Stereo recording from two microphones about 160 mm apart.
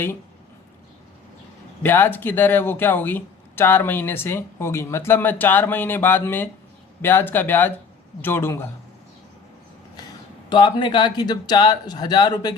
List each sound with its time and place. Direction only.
1.8 s speech: 15° left (ahead or behind)
10.5 s speech: 30° left (ahead or behind)